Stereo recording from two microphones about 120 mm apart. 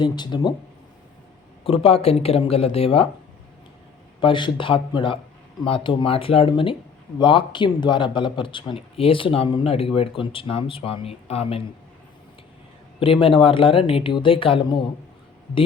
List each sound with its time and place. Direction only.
0.0 s speech: 40° left (ahead or behind)
1.6 s speech: 55° left (ahead or behind)
4.2 s a man's voice: 40° left (ahead or behind)
13.0 s a man's voice: 50° left (ahead or behind)